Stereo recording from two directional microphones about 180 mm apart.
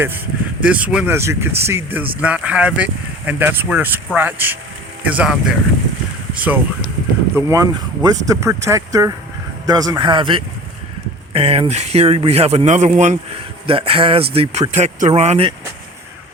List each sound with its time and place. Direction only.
0.7 s speech: 5° right (ahead or behind); by 13.1 s 40° right (ahead or behind)
13.7 s speech: 30° right (ahead or behind)